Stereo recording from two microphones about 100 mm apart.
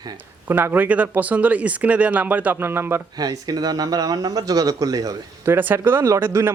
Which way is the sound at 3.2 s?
40° right (ahead or behind).